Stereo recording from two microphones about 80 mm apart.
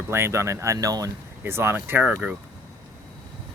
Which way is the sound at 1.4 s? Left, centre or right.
Right.